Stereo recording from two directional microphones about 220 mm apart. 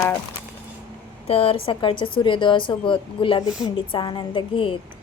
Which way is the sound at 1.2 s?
25° left (ahead or behind).